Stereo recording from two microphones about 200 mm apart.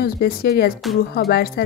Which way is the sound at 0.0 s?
50° left (ahead or behind).